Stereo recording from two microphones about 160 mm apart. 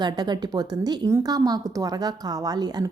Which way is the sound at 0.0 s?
25° right (ahead or behind).